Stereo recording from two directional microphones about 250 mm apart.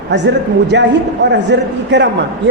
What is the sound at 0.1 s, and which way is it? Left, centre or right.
A man's voice, right.